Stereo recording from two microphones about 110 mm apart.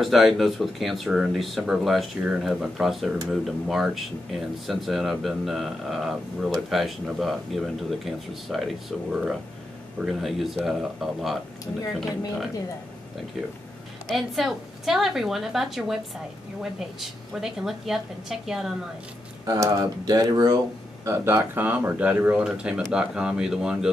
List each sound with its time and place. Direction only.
0.0 s speech: centre (ahead or behind)
14.1 s speech: centre (ahead or behind)
19.4 s speech: 35° right (ahead or behind)
21.1 s speech: 25° right (ahead or behind); by 23.9 s 5° right (ahead or behind)